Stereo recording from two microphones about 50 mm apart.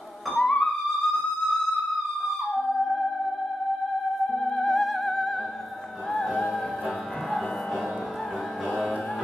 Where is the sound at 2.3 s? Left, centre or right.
Centre.